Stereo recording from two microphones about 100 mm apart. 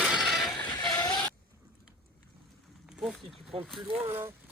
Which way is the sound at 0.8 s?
45° left (ahead or behind).